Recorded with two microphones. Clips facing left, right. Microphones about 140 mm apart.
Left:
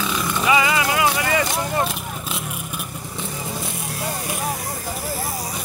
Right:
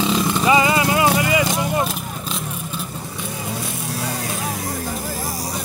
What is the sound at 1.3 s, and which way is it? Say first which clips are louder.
Vehicle: right 2 dB; 10° right (ahead or behind).